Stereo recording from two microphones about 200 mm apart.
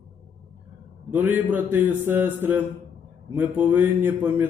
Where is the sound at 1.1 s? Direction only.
10° right (ahead or behind).